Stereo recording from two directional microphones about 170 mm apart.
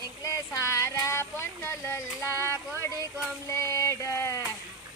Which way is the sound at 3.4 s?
15° left (ahead or behind).